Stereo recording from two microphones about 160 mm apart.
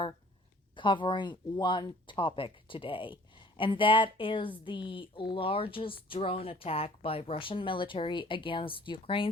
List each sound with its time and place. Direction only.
0.8 s speech: 30° left (ahead or behind)